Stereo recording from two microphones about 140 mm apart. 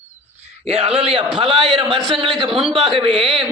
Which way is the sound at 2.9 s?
40° right (ahead or behind).